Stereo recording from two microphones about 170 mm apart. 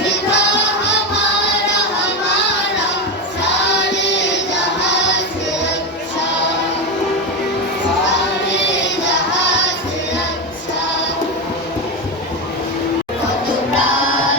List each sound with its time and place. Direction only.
0.0 s music: 90° left
3.4 s choir: 90° left
8.4 s child singing: 90° left